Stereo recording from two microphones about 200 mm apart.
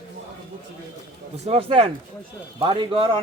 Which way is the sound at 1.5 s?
30° right (ahead or behind).